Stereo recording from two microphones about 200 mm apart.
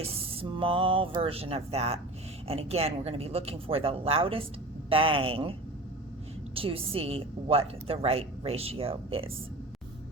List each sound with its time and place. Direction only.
0.0 s a woman's voice: 30° right (ahead or behind)